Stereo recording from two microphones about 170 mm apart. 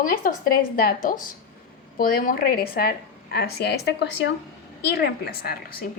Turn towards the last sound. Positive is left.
turn(degrees=65)  # may be behind; listen again after turning